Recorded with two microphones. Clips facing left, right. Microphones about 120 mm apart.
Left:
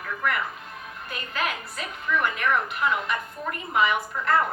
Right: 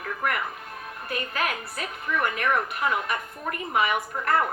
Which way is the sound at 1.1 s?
50° right (ahead or behind).